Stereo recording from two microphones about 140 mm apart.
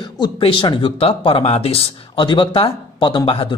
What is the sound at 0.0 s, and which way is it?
A man's voice, 35° left (ahead or behind).